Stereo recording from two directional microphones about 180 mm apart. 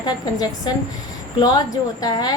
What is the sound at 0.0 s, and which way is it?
A woman's voice, 20° left (ahead or behind).